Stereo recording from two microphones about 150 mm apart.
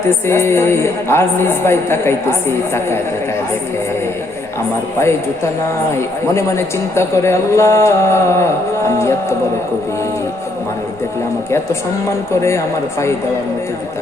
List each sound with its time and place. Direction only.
0.3 s a woman's voice: 15° left (ahead or behind)
4.9 s speech: 20° left (ahead or behind)
12.3 s speech: 20° left (ahead or behind)